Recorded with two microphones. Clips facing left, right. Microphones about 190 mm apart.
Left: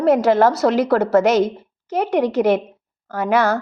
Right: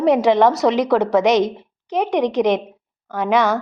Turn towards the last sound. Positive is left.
turn(degrees=5)  # may be behind; listen again after turning